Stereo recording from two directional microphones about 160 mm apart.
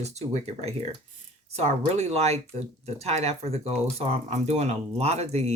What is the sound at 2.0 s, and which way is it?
Speech, 40° right (ahead or behind).